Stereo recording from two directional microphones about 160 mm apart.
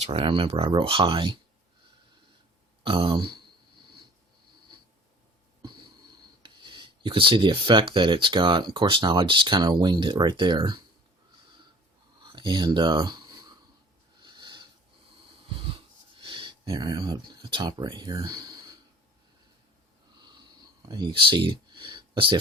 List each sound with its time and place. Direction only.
0.0 s speech: 40° right (ahead or behind)
2.8 s speech: 30° right (ahead or behind)
6.4 s speech: 30° right (ahead or behind)
12.2 s a sound: 30° right (ahead or behind)
16.2 s speech: 30° right (ahead or behind)
20.8 s speech: 25° right (ahead or behind)